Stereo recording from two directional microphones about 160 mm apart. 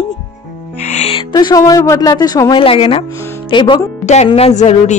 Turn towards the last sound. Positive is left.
turn(degrees=45)  # may be behind; listen again after turning